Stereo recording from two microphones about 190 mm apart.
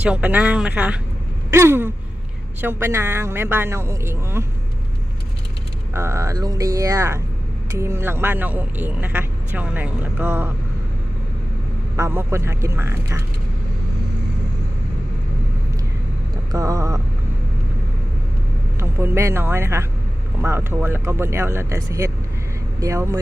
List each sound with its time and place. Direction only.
0.0 s speech: 5° right (ahead or behind)
1.5 s a sound: 15° right (ahead or behind)
2.6 s speech: 10° right (ahead or behind)
5.9 s speech: 15° right (ahead or behind)
11.9 s speech: 15° right (ahead or behind)
16.5 s speech: 20° right (ahead or behind)
18.8 s speech: 15° right (ahead or behind)